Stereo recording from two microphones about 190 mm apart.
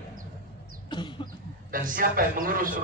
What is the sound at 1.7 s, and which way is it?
A man's voice, 45° right (ahead or behind).